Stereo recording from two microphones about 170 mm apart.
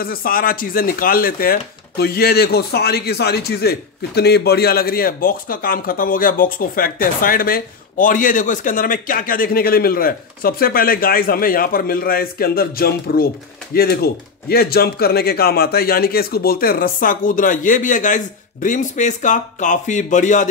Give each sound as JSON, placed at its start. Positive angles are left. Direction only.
{"t": 0.0, "sound": "speech", "side_deg": 60}